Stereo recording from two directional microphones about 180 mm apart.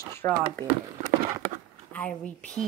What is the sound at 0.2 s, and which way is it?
Speech, 15° left (ahead or behind).